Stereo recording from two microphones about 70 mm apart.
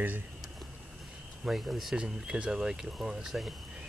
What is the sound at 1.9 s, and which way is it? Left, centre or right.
Speech, centre.